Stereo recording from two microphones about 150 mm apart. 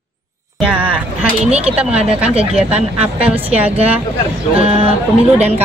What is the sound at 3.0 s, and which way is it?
Speech, 10° right (ahead or behind).